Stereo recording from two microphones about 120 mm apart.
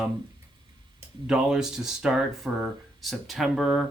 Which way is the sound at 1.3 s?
5° right (ahead or behind).